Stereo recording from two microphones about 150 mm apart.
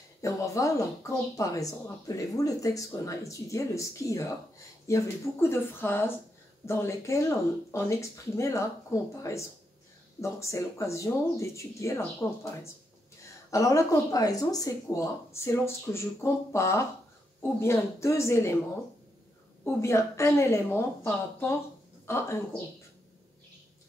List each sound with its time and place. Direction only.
0.2 s speech: 20° left (ahead or behind)
19.6 s speech: 15° left (ahead or behind)